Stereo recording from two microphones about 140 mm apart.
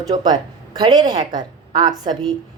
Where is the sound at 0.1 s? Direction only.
30° right (ahead or behind).